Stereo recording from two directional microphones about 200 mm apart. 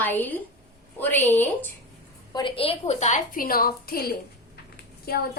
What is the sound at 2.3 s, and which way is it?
A woman's voice, 25° left (ahead or behind).